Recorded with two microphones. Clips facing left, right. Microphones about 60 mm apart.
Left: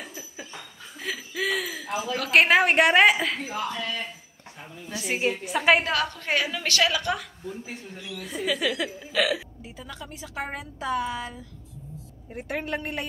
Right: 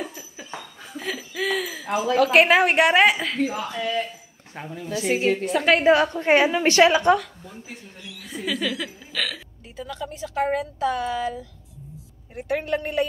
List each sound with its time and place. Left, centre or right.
0.0 s a sound: centre
0.9 s laughter: centre
2.1 s a woman's voice: centre
5.9 s a woman's voice: right
8.0 s speech: centre
12.4 s a woman's voice: centre